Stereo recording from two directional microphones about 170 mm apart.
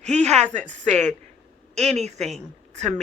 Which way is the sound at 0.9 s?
5° left (ahead or behind).